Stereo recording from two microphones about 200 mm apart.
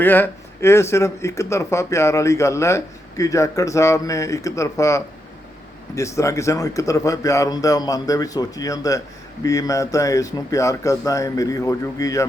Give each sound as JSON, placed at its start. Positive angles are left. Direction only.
{"t": 0.0, "sound": "speech", "side_deg": 10}